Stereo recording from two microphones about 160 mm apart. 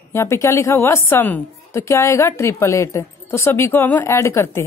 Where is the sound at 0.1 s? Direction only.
15° left (ahead or behind).